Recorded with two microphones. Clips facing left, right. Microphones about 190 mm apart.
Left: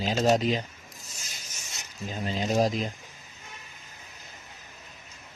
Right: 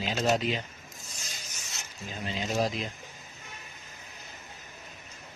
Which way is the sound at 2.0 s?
40° left (ahead or behind).